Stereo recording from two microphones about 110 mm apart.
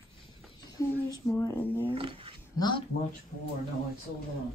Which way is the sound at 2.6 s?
45° left (ahead or behind).